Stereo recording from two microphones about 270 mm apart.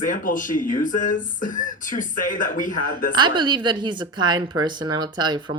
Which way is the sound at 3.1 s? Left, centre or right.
Centre.